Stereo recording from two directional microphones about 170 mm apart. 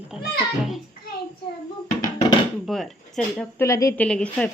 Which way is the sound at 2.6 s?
Centre (ahead or behind).